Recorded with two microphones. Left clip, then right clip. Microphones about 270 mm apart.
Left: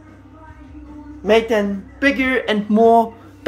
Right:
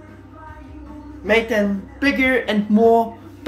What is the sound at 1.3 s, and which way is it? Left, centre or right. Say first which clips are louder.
Speech: left 2 dB; centre.